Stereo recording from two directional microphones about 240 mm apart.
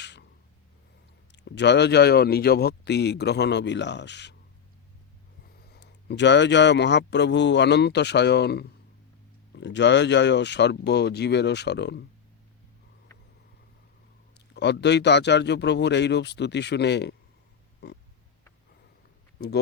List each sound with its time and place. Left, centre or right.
0.0 s a sound: left
1.3 s speech: left
5.7 s speech: left
14.3 s speech: left